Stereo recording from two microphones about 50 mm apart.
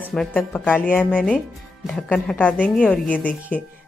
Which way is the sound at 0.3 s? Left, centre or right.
Left.